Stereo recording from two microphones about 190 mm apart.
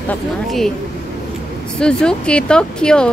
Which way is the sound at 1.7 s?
5° left (ahead or behind).